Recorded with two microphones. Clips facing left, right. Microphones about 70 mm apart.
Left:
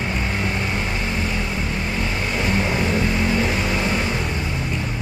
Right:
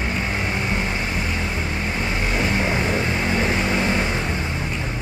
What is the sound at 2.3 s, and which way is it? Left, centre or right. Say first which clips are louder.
Vehicle: even; right.